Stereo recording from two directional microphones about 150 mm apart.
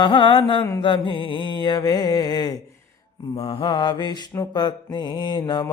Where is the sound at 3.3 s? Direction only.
40° left (ahead or behind).